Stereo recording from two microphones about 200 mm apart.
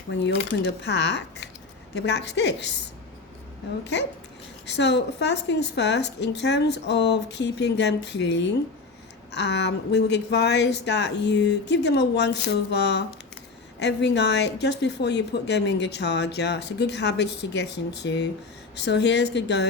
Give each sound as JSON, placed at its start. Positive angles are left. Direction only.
{"t": 0.5, "sound": "speech", "side_deg": 60}
{"t": 4.6, "sound": "speech", "side_deg": 60}